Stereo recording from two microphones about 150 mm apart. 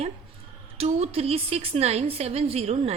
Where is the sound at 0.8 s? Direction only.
45° right (ahead or behind).